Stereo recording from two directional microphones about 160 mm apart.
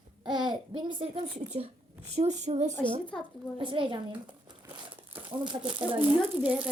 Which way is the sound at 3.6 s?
30° right (ahead or behind).